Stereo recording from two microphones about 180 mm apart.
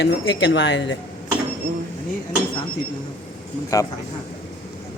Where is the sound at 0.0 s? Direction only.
90° left.